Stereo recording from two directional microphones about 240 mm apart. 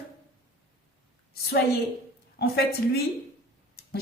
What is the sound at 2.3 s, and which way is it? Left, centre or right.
Speech, left.